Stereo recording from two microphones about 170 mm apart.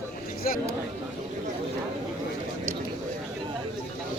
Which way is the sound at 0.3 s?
60° left (ahead or behind).